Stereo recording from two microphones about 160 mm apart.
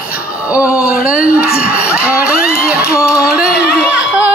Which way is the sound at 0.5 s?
10° right (ahead or behind).